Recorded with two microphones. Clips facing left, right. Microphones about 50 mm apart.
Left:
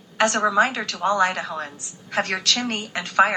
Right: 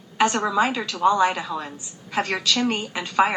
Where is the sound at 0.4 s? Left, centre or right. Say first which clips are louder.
Left 2 dB; left.